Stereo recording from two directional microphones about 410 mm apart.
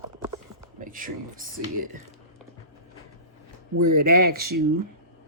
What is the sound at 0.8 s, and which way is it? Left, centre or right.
Speech, centre.